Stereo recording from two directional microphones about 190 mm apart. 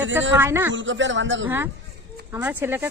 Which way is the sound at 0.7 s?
75° right (ahead or behind).